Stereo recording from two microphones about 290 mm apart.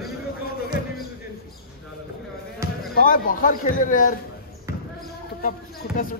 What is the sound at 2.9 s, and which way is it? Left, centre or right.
A man's voice, left.